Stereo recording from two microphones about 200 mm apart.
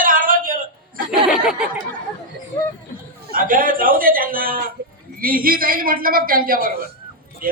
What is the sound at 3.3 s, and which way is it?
A man's voice, 45° right (ahead or behind).